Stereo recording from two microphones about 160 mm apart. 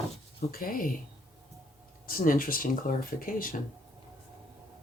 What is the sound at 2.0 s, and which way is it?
Speech, 65° left (ahead or behind).